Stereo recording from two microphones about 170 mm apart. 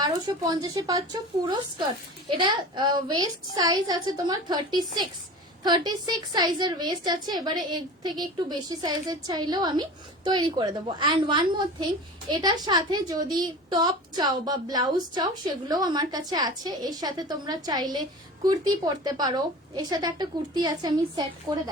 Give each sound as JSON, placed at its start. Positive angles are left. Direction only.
{"t": 0.0, "sound": "a woman's voice", "side_deg": -25}
{"t": 2.4, "sound": "a woman's voice", "side_deg": -25}